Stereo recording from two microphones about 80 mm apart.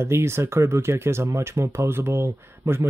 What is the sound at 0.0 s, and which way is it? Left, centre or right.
Speech, right.